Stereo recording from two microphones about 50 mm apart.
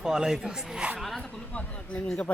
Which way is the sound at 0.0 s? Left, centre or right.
Centre.